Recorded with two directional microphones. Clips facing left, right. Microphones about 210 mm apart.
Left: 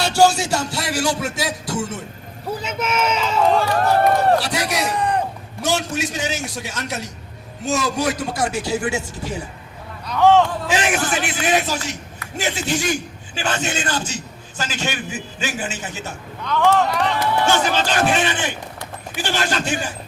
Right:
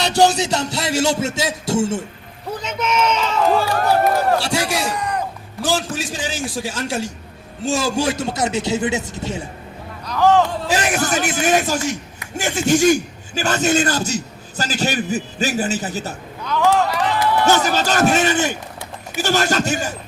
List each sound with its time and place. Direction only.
0.0 s music: 20° right (ahead or behind)
2.6 s a sound: 5° left (ahead or behind)
4.4 s music: 30° right (ahead or behind)
4.9 s a sound: 30° left (ahead or behind)
5.6 s a man's voice: 30° right (ahead or behind)
7.6 s music: 30° right (ahead or behind)
10.1 s a sound: centre (ahead or behind)
10.7 s a man's voice: 40° right (ahead or behind)
16.4 s speech: 5° right (ahead or behind)
17.4 s a man's voice: 40° right (ahead or behind)